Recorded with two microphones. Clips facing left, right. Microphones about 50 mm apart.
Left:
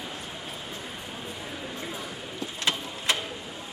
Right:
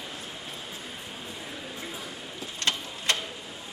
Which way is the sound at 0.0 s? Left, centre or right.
Centre.